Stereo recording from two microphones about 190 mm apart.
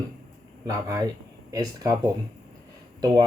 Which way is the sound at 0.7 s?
20° right (ahead or behind).